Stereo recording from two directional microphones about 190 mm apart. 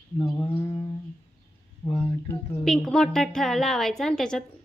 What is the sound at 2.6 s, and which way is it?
A woman's voice, centre (ahead or behind).